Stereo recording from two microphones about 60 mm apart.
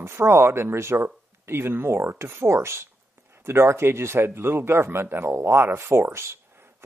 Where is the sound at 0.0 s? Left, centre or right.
Right.